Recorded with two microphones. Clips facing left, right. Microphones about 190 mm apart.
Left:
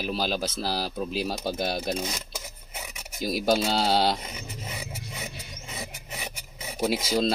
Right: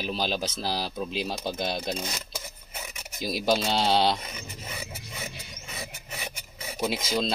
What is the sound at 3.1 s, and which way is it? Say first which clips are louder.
Speech: left 2 dB; 5° left (ahead or behind).